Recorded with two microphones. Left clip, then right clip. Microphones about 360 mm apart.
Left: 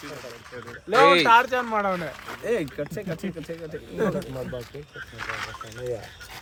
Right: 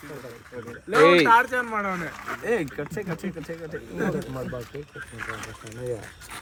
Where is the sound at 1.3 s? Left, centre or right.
Left.